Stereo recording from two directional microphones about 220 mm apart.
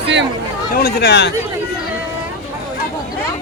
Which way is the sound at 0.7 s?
45° left (ahead or behind).